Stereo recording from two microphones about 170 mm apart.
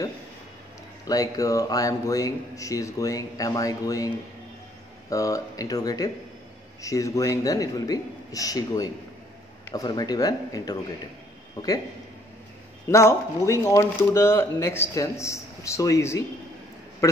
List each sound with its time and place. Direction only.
1.0 s speech: 20° left (ahead or behind)
5.1 s speech: 20° left (ahead or behind)
12.8 s speech: 15° left (ahead or behind)